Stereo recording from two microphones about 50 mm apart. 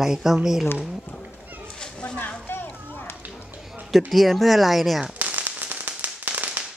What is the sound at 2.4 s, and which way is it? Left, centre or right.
Children playing, left.